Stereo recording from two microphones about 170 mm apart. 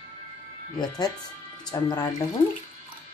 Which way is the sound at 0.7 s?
25° left (ahead or behind).